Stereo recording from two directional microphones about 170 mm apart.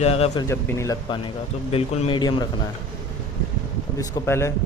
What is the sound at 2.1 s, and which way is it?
Speech, 25° left (ahead or behind).